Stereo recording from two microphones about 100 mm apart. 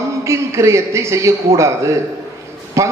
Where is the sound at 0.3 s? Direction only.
30° right (ahead or behind).